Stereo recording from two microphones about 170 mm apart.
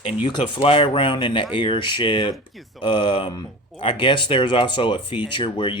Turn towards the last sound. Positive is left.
turn(degrees=30)  # may be behind; listen again after turning